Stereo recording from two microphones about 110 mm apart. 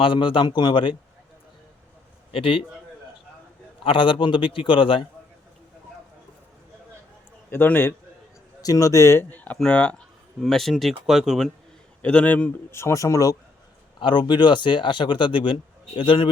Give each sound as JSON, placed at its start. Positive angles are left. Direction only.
{"t": 0.0, "sound": "speech", "side_deg": 50}
{"t": 2.3, "sound": "speech", "side_deg": 55}
{"t": 3.8, "sound": "speech", "side_deg": 50}
{"t": 7.5, "sound": "speech", "side_deg": 20}
{"t": 8.6, "sound": "a man's voice", "side_deg": 30}
{"t": 12.0, "sound": "a man's voice", "side_deg": 15}
{"t": 12.7, "sound": "speech", "side_deg": 25}
{"t": 14.0, "sound": "speech", "side_deg": 45}